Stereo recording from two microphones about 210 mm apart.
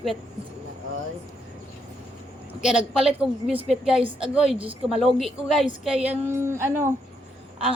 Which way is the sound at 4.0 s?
25° right (ahead or behind).